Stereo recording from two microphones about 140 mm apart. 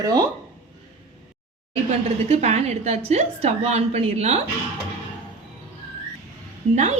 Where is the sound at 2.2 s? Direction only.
50° right (ahead or behind).